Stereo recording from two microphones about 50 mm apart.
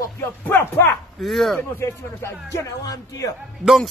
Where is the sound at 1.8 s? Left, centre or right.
Left.